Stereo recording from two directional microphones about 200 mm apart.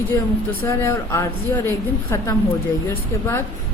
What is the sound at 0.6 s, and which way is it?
A woman's voice, 15° left (ahead or behind).